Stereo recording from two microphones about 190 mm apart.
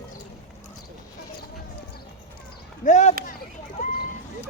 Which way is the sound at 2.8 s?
40° left (ahead or behind).